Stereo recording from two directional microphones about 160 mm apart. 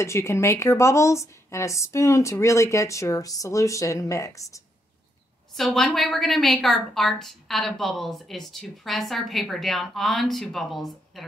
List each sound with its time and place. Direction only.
0.0 s speech: 15° left (ahead or behind)
5.5 s a woman's voice: centre (ahead or behind)